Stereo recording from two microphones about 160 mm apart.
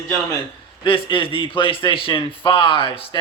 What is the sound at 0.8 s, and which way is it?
A man's voice, 30° left (ahead or behind).